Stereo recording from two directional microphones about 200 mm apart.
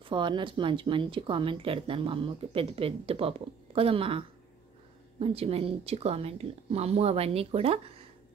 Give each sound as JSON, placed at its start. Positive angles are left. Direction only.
{"t": 0.0, "sound": "a woman's voice", "side_deg": -25}